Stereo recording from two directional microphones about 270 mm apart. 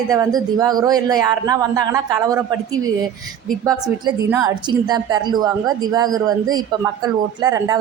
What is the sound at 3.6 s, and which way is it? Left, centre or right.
A woman's voice, centre.